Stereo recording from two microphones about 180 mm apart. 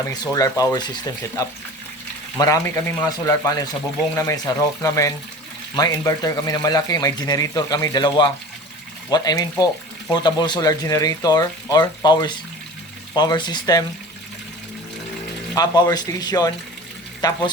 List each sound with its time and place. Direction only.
0.0 s speech: 20° left (ahead or behind)
2.4 s speech: 15° left (ahead or behind)
15.5 s speech: 25° left (ahead or behind)